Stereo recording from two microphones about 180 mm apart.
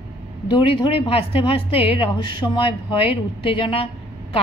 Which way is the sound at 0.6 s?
30° left (ahead or behind).